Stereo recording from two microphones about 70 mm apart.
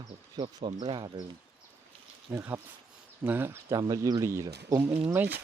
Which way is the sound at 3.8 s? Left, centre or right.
Right.